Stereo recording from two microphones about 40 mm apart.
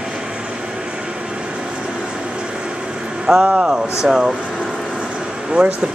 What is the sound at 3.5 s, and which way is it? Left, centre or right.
Speech, right.